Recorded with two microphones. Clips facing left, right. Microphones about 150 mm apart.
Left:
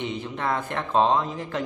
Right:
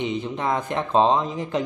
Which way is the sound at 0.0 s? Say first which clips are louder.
Right 3 dB; 20° right (ahead or behind).